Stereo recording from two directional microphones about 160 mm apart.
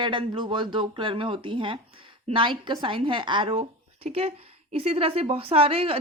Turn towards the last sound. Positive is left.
turn(degrees=-35)  # may be behind; listen again after turning